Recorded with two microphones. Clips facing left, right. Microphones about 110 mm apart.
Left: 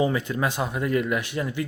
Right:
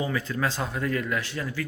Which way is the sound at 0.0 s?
20° left (ahead or behind).